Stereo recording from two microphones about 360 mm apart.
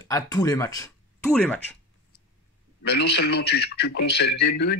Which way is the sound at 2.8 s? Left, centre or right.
Left.